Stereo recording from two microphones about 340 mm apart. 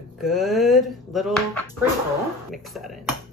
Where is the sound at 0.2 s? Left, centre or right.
Centre.